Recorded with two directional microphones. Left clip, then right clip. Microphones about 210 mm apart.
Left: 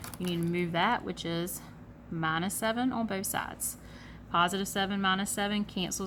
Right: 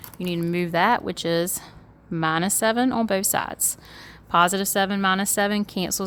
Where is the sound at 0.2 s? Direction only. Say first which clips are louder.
Right 7 dB; 50° right (ahead or behind).